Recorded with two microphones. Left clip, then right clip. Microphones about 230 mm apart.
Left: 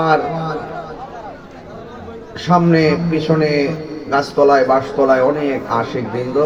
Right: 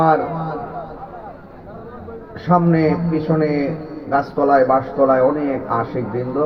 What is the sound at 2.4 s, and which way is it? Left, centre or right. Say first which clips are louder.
A man's voice: left 3 dB; left.